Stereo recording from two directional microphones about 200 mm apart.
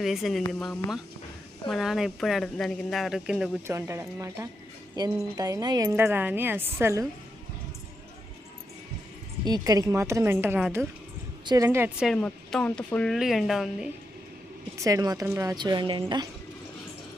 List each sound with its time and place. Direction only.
0.0 s speech: centre (ahead or behind)
1.6 s a woman's voice: centre (ahead or behind)
9.4 s speech: 20° right (ahead or behind); by 13.9 s 5° right (ahead or behind)
14.8 s a woman's voice: 15° right (ahead or behind)